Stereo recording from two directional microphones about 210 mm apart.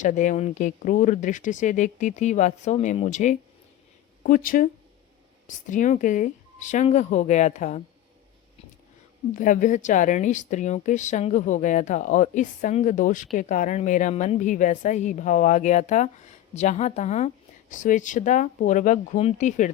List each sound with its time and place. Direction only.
0.0 s a woman's voice: 35° left (ahead or behind)
9.3 s a woman's voice: 40° left (ahead or behind)